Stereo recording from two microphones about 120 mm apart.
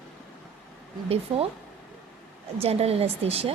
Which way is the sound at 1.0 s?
55° right (ahead or behind).